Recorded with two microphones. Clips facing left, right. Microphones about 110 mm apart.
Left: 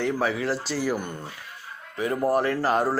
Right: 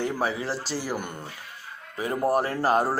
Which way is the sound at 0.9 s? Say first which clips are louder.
Left 5 dB; 10° right (ahead or behind).